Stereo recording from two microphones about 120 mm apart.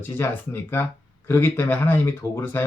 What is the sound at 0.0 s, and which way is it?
Speech, 20° left (ahead or behind).